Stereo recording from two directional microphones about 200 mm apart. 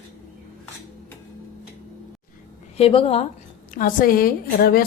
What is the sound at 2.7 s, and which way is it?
Speech, 30° left (ahead or behind).